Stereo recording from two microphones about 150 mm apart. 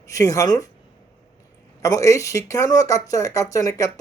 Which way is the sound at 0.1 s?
20° left (ahead or behind).